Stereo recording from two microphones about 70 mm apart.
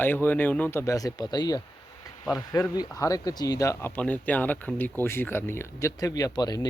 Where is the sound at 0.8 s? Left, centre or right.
Left.